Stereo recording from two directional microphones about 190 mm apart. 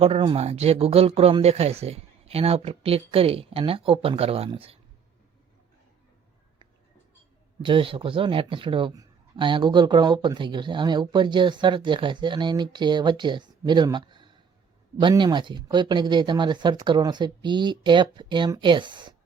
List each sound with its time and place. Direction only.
0.0 s speech: 30° right (ahead or behind)
7.6 s a man's voice: 25° right (ahead or behind)